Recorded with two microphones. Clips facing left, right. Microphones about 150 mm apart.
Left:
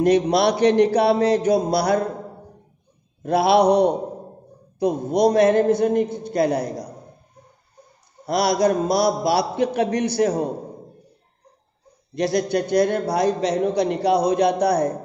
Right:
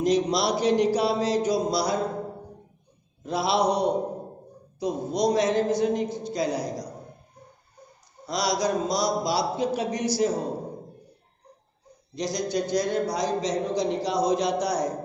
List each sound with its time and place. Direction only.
0.0 s a man's voice: 60° left (ahead or behind)
3.3 s a man's voice: 60° left (ahead or behind)
8.3 s a man's voice: 55° left (ahead or behind)
12.2 s a man's voice: 60° left (ahead or behind)